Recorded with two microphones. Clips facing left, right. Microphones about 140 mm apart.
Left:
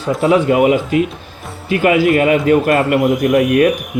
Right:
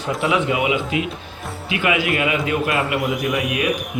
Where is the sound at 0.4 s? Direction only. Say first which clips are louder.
Left 8 dB; 50° left (ahead or behind).